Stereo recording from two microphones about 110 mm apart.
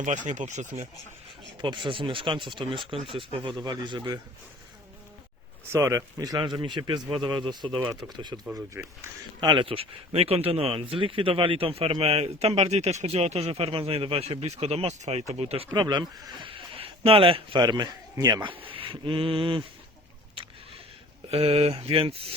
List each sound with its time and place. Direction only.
0.3 s speech: 90° right
1.6 s a sound: 50° right (ahead or behind)
3.6 s speech: 40° right (ahead or behind)
5.7 s speech: 25° right (ahead or behind); by 8.4 s 40° right (ahead or behind)
8.7 s speech: 20° right (ahead or behind)
9.4 s speech: 45° right (ahead or behind); by 15.7 s 65° right (ahead or behind)
15.7 s speech: 40° right (ahead or behind)
16.5 s a sound: 60° right (ahead or behind)
17.5 s speech: 40° right (ahead or behind)
18.6 s a sound: 55° right (ahead or behind)
21.2 s speech: 65° right (ahead or behind)